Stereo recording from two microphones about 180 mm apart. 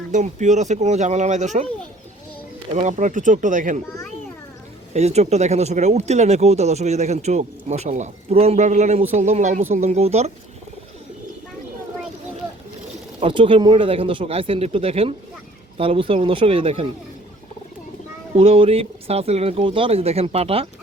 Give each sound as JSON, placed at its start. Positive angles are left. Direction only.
{"t": 0.1, "sound": "speech", "side_deg": -40}
{"t": 2.7, "sound": "speech", "side_deg": -40}
{"t": 4.9, "sound": "speech", "side_deg": -35}
{"t": 13.1, "sound": "speech", "side_deg": -30}
{"t": 18.3, "sound": "speech", "side_deg": -30}